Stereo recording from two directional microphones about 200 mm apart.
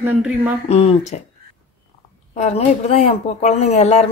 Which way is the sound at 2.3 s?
35° left (ahead or behind).